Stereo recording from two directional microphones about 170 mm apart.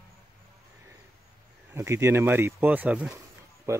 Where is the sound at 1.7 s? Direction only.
15° right (ahead or behind).